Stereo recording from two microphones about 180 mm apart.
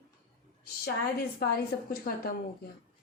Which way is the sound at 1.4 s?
60° left (ahead or behind).